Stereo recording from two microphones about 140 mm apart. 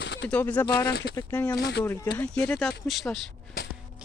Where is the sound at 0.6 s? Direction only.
30° left (ahead or behind).